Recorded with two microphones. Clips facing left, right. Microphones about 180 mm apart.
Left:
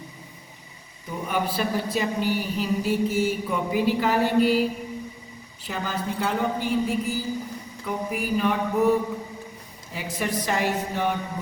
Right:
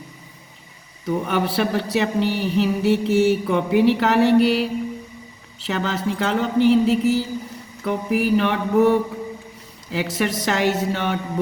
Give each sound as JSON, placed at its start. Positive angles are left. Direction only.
{"t": 1.0, "sound": "a woman's voice", "side_deg": -75}